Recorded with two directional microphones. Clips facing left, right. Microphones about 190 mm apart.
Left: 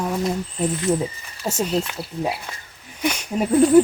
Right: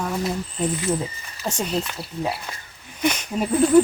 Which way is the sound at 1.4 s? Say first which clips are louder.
Left 3 dB; 10° left (ahead or behind).